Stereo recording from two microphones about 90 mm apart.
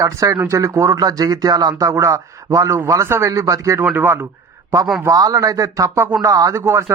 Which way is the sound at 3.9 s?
25° right (ahead or behind).